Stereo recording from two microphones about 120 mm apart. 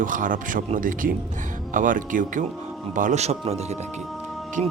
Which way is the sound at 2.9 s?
80° right.